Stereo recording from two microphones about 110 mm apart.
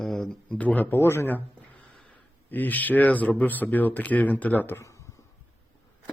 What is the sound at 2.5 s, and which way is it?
Speech, 15° left (ahead or behind).